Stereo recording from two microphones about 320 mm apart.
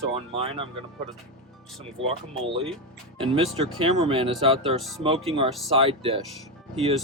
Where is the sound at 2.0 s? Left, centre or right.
Right.